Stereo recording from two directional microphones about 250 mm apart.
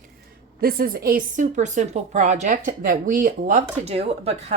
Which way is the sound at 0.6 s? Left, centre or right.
Right.